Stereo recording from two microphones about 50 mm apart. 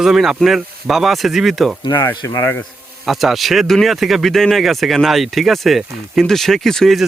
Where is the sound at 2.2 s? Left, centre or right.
Left.